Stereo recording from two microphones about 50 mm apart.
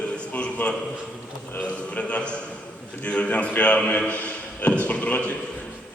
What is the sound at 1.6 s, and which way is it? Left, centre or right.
A man's voice, left.